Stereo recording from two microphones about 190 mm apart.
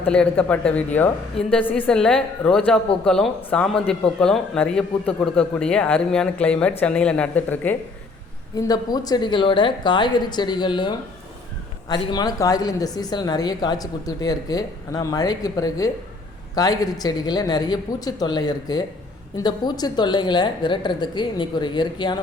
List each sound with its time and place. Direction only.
0.1 s a woman's voice: 5° left (ahead or behind)
8.5 s speech: 20° left (ahead or behind)